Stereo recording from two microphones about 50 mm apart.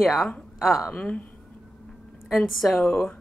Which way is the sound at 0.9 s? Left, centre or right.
Left.